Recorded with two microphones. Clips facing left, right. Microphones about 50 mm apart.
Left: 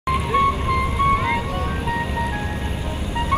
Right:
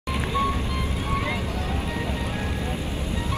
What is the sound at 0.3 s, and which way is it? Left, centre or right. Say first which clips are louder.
Vehicle: left 7 dB; left.